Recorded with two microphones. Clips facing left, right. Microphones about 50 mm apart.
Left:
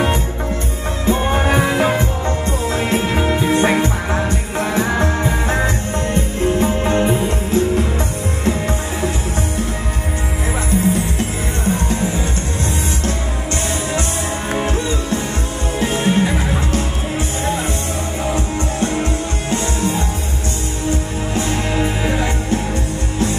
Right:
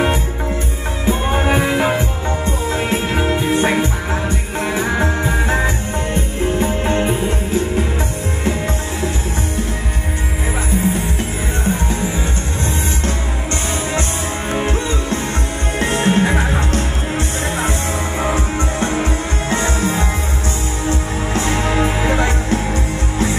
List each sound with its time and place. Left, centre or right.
1.0 s music: centre
15.8 s music: right
21.3 s music: right